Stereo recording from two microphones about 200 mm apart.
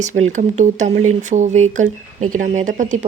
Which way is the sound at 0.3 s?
35° right (ahead or behind).